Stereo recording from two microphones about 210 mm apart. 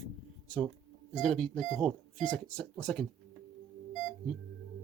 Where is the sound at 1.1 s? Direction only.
Centre (ahead or behind).